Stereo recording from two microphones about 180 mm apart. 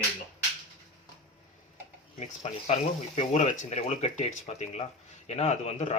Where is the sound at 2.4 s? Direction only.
40° left (ahead or behind).